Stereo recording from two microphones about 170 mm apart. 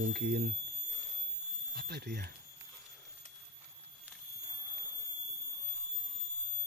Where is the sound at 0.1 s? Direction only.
75° right (ahead or behind).